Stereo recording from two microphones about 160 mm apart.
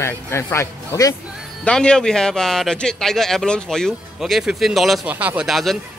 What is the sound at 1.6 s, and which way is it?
Speech, 5° left (ahead or behind).